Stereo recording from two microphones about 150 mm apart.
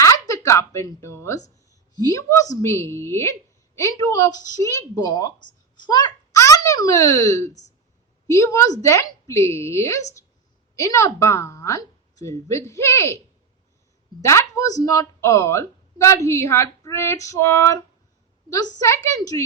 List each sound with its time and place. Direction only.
0.0 s a child's voice: 20° left (ahead or behind)
14.2 s speech: 20° left (ahead or behind)